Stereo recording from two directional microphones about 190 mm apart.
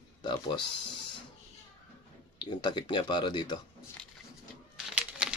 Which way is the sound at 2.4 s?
25° left (ahead or behind).